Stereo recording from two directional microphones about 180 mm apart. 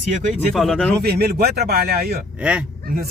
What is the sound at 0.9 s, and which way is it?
Speech, 60° right (ahead or behind).